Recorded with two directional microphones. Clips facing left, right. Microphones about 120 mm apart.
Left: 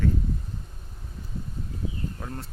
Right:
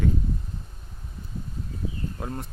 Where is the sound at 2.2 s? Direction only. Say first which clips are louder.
Right 4 dB; 20° right (ahead or behind).